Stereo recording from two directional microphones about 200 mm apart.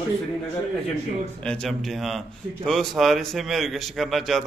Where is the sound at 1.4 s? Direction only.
5° left (ahead or behind).